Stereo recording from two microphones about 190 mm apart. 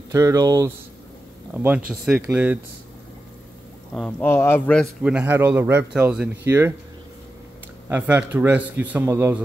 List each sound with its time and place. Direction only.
0.1 s speech: 15° right (ahead or behind)
3.9 s speech: 10° left (ahead or behind)
5.0 s speech: 10° right (ahead or behind)
7.9 s speech: 10° right (ahead or behind)